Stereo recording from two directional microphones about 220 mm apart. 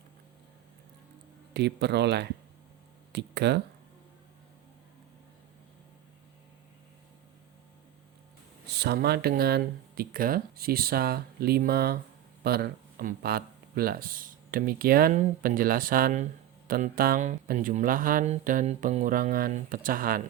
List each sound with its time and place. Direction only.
1.5 s speech: 50° right (ahead or behind)
8.6 s speech: 45° right (ahead or behind)